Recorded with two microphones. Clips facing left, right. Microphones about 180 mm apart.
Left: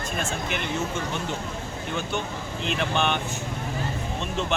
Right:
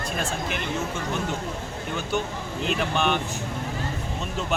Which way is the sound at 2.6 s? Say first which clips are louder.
Right 1 dB; 5° right (ahead or behind).